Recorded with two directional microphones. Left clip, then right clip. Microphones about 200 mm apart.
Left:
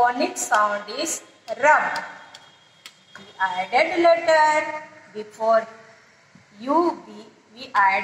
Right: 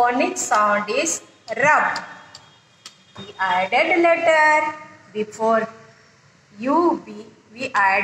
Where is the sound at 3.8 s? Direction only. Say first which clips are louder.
Left 1 dB; 25° right (ahead or behind).